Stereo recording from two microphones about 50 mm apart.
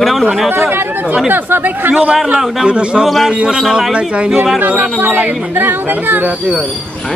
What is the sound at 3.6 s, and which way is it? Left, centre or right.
Speech, centre.